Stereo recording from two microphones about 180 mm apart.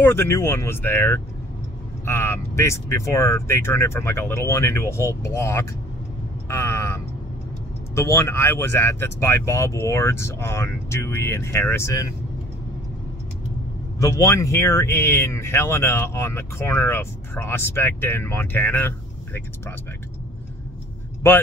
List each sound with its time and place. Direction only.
0.0 s speech: 15° left (ahead or behind)
6.5 s a sound: 15° left (ahead or behind)
7.9 s speech: 15° left (ahead or behind)
14.0 s speech: 15° left (ahead or behind)
21.2 s speech: 15° left (ahead or behind)